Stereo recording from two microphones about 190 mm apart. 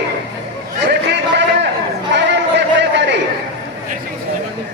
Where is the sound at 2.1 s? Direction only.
65° right (ahead or behind).